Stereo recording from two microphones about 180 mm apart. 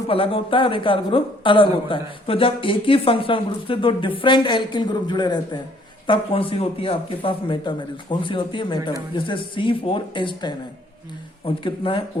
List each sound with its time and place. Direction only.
0.1 s speech: 30° left (ahead or behind)